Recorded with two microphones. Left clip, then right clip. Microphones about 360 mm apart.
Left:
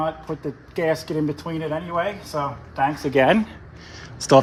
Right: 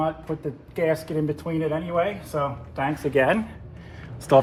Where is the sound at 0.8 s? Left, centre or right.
Centre.